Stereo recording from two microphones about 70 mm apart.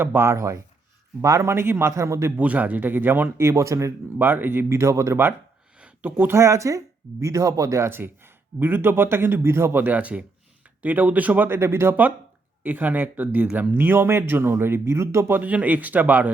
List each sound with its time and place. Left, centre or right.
0.0 s speech: right
2.4 s speech: right
4.2 s speech: right
5.8 s speech: right
9.8 s speech: right
12.6 s speech: right
15.3 s speech: right